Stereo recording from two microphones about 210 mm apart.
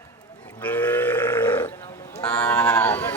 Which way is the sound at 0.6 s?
10° left (ahead or behind).